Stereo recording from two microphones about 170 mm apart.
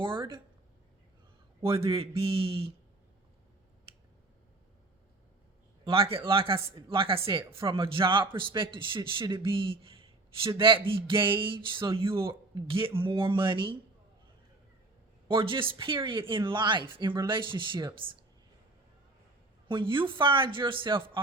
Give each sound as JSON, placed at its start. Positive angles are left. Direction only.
{"t": 0.0, "sound": "speech", "side_deg": -30}
{"t": 1.6, "sound": "speech", "side_deg": -30}
{"t": 5.8, "sound": "a man's voice", "side_deg": -30}
{"t": 15.3, "sound": "speech", "side_deg": -30}
{"t": 19.6, "sound": "speech", "side_deg": -30}